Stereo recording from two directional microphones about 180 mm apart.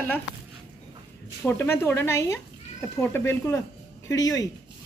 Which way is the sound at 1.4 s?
10° left (ahead or behind).